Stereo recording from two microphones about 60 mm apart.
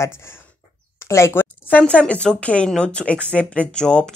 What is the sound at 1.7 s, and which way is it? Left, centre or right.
Speech, left.